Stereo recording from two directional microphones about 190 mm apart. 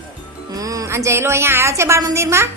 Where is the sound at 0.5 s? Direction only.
20° right (ahead or behind).